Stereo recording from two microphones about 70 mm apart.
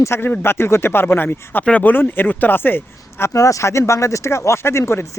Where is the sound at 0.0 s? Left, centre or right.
Left.